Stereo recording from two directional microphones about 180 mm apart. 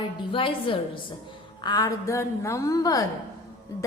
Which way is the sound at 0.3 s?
30° left (ahead or behind).